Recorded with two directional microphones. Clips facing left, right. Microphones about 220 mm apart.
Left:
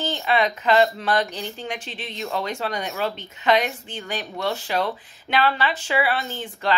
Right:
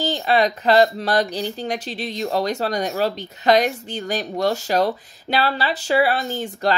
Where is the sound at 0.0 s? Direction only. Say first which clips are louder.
Right 3 dB; 35° right (ahead or behind).